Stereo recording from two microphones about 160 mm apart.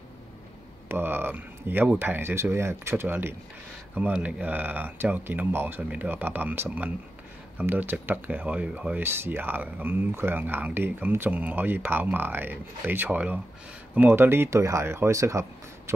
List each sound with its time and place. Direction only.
0.8 s speech: 15° right (ahead or behind)